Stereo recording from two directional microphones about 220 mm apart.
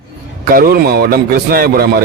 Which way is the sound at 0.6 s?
45° right (ahead or behind).